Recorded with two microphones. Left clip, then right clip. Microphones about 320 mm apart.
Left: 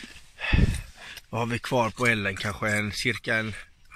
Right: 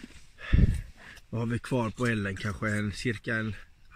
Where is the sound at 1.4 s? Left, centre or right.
Centre.